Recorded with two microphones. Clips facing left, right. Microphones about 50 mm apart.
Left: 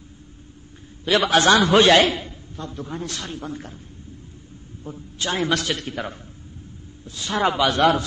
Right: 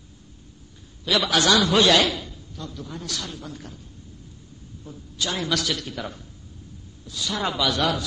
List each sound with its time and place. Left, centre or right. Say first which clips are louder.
1.0 s a man's voice: left 4 dB; left
4.8 s a man's voice: left 2 dB; left